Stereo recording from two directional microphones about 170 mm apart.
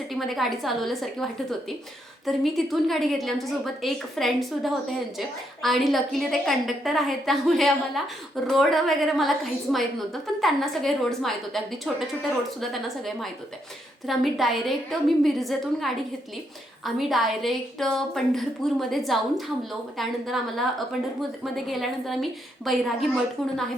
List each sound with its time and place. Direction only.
0.1 s a woman's voice: centre (ahead or behind)